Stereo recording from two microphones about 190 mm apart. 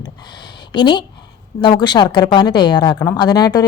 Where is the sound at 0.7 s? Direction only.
25° left (ahead or behind).